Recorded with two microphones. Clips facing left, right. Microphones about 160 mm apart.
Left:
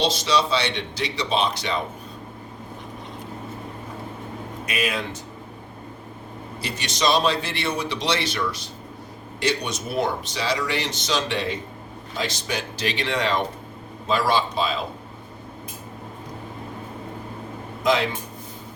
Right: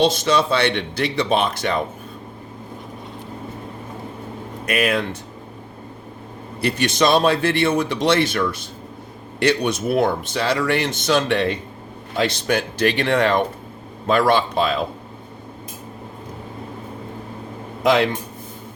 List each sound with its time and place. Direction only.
0.0 s speech: 50° right (ahead or behind)
4.6 s speech: 55° right (ahead or behind)
6.6 s speech: 55° right (ahead or behind)
17.8 s speech: 60° right (ahead or behind)